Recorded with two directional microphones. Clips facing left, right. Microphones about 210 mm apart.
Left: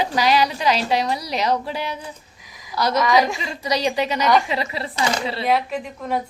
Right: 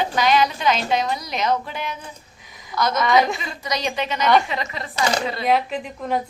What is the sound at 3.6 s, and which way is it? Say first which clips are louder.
A woman's voice: left 5 dB; 35° left (ahead or behind).